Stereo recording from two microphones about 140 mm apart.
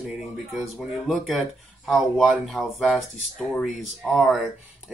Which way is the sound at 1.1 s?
Centre (ahead or behind).